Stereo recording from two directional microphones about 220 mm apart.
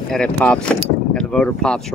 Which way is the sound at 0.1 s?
5° left (ahead or behind).